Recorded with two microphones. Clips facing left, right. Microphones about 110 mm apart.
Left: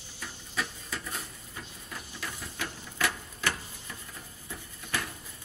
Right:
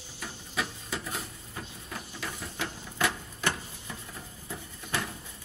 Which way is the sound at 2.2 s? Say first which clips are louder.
Right 1 dB; 10° right (ahead or behind).